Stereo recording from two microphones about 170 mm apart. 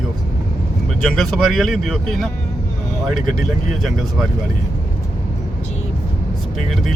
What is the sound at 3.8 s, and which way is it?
Speech, centre (ahead or behind).